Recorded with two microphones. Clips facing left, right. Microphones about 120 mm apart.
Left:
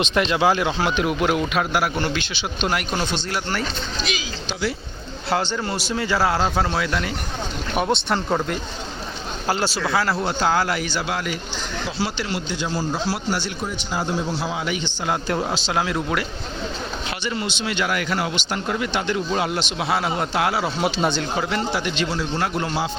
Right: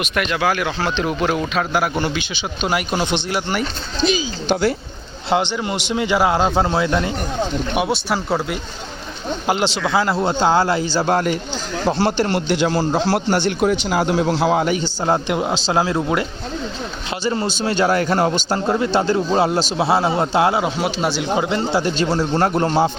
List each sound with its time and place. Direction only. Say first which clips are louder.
0.0 s speech: left 1 dB; 25° left (ahead or behind)
0.9 s speech: right 2 dB; 5° left (ahead or behind)
2.0 s speech: right 2 dB; 5° right (ahead or behind)
5.3 s a man's voice: right 4 dB; 15° right (ahead or behind)
7.8 s speech: left 1 dB; 5° right (ahead or behind)
9.5 s a man's voice: right 3 dB; 20° right (ahead or behind)
11.0 s speech: right 8 dB; 45° right (ahead or behind)
12.5 s a man's voice: right 7 dB; 75° right (ahead or behind)
14.5 s a man's voice: right 8 dB; 45° right (ahead or behind)
15.3 s speech: right 3 dB; 15° right (ahead or behind)
15.5 s a man's voice: right 5 dB; 30° right (ahead or behind)
17.2 s a man's voice: right 7 dB; 40° right (ahead or behind); by 20.7 s 20° right (ahead or behind)
20.7 s speech: right 1 dB; 5° right (ahead or behind)
21.3 s a man's voice: right 5 dB; 25° right (ahead or behind); by 22.9 s 45° right (ahead or behind)